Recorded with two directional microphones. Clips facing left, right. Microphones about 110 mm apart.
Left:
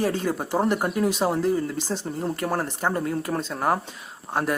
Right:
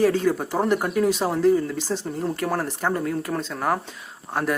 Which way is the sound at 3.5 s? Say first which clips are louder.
Left 1 dB; 20° left (ahead or behind).